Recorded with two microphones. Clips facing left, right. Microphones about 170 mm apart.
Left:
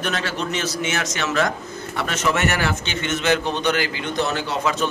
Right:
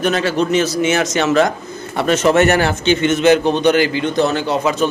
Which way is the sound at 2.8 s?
15° right (ahead or behind).